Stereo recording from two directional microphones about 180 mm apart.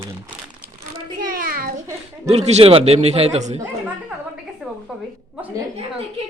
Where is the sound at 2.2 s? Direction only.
35° right (ahead or behind).